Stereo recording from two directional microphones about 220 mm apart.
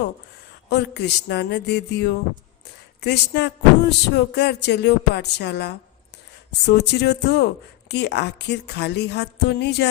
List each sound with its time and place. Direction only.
0.7 s speech: 50° left (ahead or behind)